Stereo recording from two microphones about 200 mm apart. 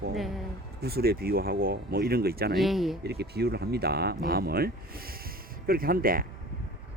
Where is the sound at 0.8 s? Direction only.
50° right (ahead or behind).